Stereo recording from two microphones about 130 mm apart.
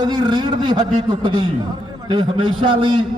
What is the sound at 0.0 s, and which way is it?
A man's voice, 35° right (ahead or behind).